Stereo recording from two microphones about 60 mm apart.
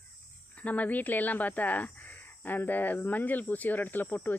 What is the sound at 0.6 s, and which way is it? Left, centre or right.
Speech, left.